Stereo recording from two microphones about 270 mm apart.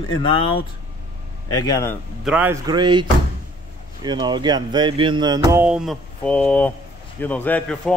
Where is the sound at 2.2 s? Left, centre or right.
Centre.